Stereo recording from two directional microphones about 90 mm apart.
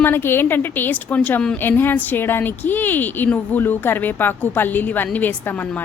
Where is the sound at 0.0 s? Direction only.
25° left (ahead or behind).